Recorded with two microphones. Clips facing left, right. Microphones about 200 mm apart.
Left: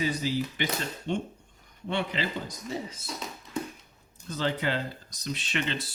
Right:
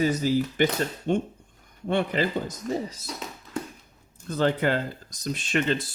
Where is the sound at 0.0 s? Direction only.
45° right (ahead or behind).